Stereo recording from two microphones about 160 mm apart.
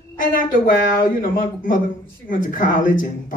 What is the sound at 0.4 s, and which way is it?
Speech, 55° left (ahead or behind).